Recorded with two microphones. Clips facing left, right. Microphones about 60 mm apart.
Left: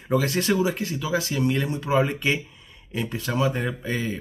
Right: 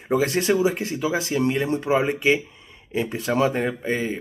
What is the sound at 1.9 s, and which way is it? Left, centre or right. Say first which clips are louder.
Speech: right 2 dB; centre.